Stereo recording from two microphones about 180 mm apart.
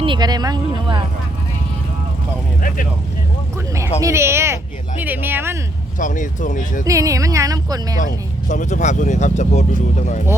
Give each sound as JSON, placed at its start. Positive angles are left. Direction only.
{"t": 0.0, "sound": "speech", "side_deg": -25}
{"t": 4.0, "sound": "speech", "side_deg": -15}
{"t": 6.0, "sound": "speech", "side_deg": 45}
{"t": 6.8, "sound": "speech", "side_deg": -20}
{"t": 8.4, "sound": "speech", "side_deg": 40}